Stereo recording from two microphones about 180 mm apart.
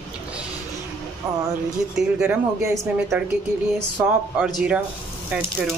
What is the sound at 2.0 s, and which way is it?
Speech, 5° right (ahead or behind).